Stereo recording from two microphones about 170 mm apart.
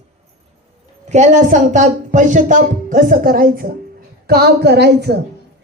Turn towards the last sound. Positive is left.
turn(degrees=-75)  # may be behind; listen again after turning